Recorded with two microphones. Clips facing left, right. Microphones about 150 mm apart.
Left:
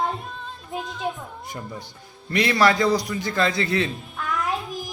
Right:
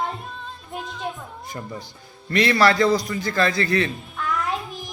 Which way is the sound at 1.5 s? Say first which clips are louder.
Right 3 dB; 5° left (ahead or behind).